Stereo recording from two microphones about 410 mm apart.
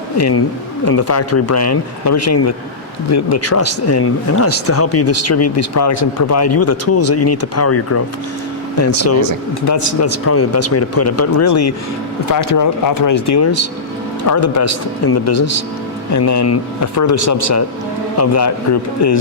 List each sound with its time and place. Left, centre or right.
0.2 s speech: left
12.3 s speech: left
16.1 s speech: left